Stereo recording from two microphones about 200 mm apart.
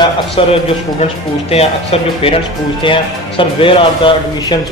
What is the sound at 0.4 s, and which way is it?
Speech, 25° left (ahead or behind).